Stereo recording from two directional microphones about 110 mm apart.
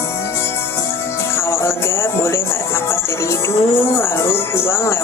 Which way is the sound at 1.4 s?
25° left (ahead or behind).